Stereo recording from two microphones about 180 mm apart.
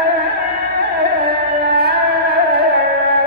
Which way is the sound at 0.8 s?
60° right (ahead or behind).